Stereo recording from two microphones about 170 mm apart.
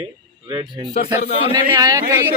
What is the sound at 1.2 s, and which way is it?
Speech, 35° left (ahead or behind).